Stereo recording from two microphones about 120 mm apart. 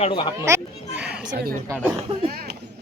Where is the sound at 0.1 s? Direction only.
40° left (ahead or behind).